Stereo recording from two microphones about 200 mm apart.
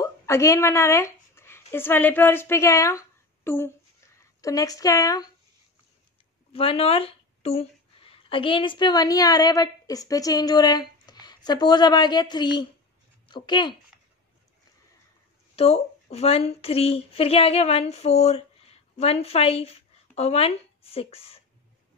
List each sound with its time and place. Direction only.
0.0 s speech: 15° left (ahead or behind)
6.5 s speech: 30° left (ahead or behind)
15.5 s speech: 30° left (ahead or behind)